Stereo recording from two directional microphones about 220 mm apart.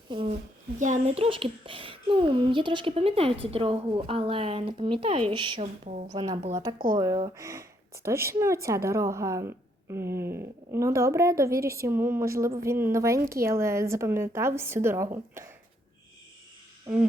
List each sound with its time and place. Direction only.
0.1 s a child's voice: 25° right (ahead or behind)
5.8 s speech: 35° right (ahead or behind)
6.1 s a woman's voice: 20° right (ahead or behind)
6.7 s speech: 40° right (ahead or behind)
7.3 s a woman's voice: 15° right (ahead or behind)